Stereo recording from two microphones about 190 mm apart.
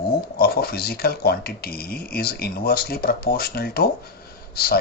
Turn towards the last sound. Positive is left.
turn(degrees=55)  # may be behind; listen again after turning